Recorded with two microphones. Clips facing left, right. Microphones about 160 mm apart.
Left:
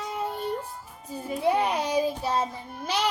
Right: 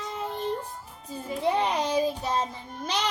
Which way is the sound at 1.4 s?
10° left (ahead or behind).